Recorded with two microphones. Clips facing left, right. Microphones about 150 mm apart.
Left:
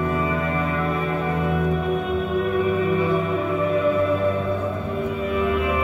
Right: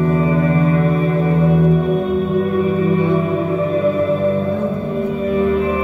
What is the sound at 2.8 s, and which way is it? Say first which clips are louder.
Music: right 5 dB; 30° right (ahead or behind).